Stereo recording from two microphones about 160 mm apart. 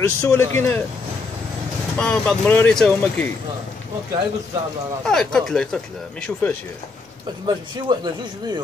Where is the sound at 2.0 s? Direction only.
5° left (ahead or behind).